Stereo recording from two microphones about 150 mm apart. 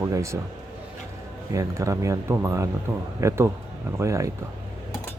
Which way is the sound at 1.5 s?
20° right (ahead or behind).